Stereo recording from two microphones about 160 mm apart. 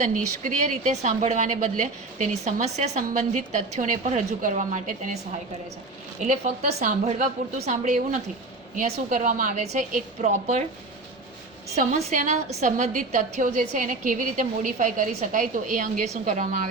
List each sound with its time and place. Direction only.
0.0 s a woman's voice: 55° right (ahead or behind)
6.1 s a woman's voice: 50° right (ahead or behind)
11.8 s a woman's voice: 50° right (ahead or behind)